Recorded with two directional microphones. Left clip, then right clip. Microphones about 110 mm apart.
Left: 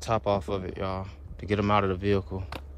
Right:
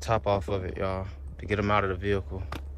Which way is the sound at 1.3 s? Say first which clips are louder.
Left 1 dB; 45° left (ahead or behind).